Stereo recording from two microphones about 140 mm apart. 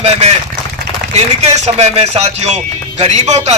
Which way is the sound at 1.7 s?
50° right (ahead or behind).